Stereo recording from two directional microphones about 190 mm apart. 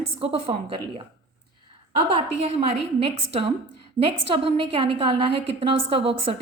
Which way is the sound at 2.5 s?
30° right (ahead or behind).